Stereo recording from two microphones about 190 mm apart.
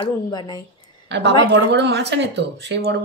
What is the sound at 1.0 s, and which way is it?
Speech, 65° right (ahead or behind).